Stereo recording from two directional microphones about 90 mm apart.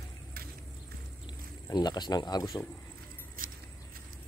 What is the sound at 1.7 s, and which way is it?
Speech, 50° left (ahead or behind).